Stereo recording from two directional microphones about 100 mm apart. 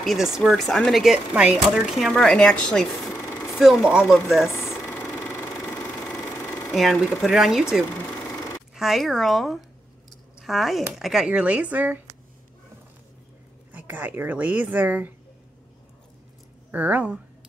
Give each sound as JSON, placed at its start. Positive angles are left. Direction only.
{"t": 0.0, "sound": "speech", "side_deg": 0}
{"t": 1.7, "sound": "speech", "side_deg": 0}
{"t": 4.5, "sound": "a sound", "side_deg": 30}
{"t": 4.7, "sound": "sewing machine", "side_deg": 15}
{"t": 6.7, "sound": "speech", "side_deg": 0}
{"t": 8.7, "sound": "speech", "side_deg": 0}
{"t": 13.7, "sound": "a woman's voice", "side_deg": -15}
{"t": 16.7, "sound": "a woman's voice", "side_deg": -15}